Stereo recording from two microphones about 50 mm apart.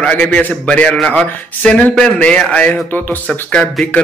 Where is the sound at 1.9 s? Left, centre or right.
Centre.